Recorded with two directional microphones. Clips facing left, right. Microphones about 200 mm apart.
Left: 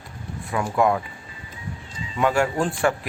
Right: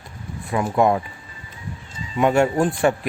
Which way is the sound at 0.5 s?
25° right (ahead or behind).